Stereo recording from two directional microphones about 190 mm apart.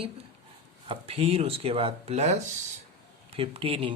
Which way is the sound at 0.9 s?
30° right (ahead or behind).